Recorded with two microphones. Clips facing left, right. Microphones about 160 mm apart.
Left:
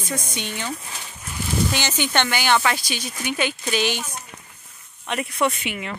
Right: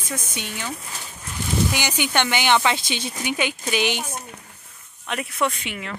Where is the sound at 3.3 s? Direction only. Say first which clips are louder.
Left 1 dB; 15° right (ahead or behind).